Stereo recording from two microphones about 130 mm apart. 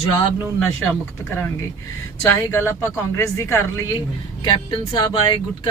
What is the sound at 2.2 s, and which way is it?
Speech, 20° left (ahead or behind).